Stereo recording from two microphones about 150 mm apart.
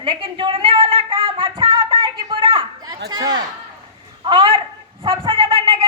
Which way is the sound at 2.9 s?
25° right (ahead or behind).